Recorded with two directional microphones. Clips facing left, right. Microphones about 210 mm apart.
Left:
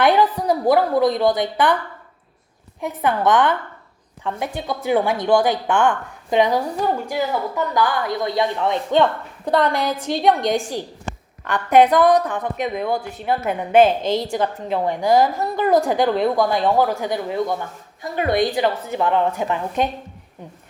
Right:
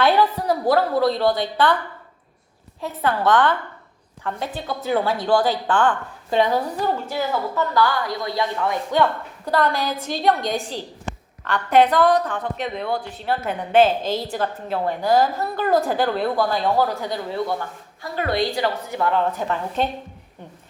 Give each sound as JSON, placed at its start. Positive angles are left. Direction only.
{"t": 0.0, "sound": "a woman's voice", "side_deg": 15}
{"t": 2.8, "sound": "a woman's voice", "side_deg": 20}